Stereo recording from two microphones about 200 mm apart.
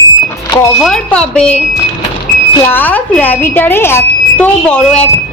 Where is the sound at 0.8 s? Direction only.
Centre (ahead or behind).